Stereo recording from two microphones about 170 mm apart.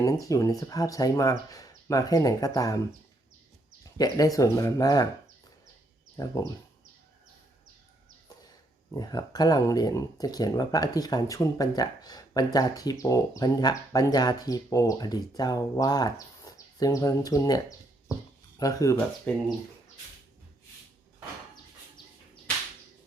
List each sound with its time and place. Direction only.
0.0 s speech: 20° left (ahead or behind)
3.9 s speech: 20° left (ahead or behind)
6.2 s speech: 20° left (ahead or behind)
8.9 s speech: 25° left (ahead or behind)